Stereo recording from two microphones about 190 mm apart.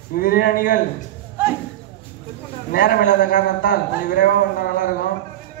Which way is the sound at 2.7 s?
50° left (ahead or behind).